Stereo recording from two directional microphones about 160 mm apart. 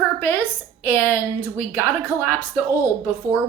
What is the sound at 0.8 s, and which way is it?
A woman's voice, 10° right (ahead or behind).